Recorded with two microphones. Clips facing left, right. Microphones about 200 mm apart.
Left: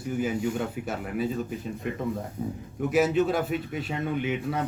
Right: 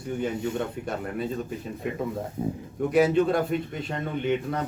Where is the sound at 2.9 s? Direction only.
5° left (ahead or behind).